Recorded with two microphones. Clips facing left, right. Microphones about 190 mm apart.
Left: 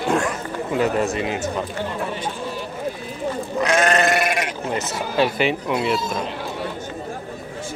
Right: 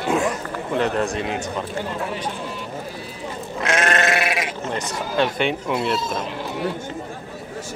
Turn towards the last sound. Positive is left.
turn(degrees=0)  # may be behind; listen again after turning